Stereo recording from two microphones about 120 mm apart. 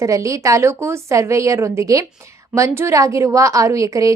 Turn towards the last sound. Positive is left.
turn(degrees=-30)  # may be behind; listen again after turning